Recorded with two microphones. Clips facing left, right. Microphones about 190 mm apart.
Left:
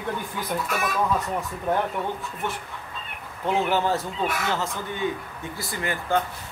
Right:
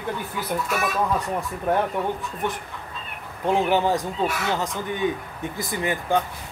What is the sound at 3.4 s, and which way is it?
Speech, 15° right (ahead or behind).